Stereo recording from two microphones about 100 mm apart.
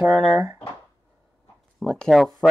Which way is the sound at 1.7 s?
5° left (ahead or behind).